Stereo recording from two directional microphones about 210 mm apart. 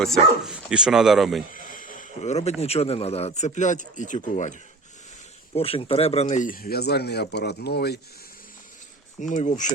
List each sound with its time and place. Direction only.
0.0 s speech: centre (ahead or behind)
1.5 s speech: 40° left (ahead or behind)
5.5 s speech: 25° left (ahead or behind); by 7.9 s 50° left (ahead or behind)
9.1 s speech: 35° left (ahead or behind)